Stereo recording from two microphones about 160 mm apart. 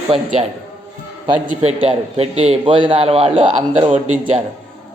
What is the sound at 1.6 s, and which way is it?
A man's voice, 40° right (ahead or behind).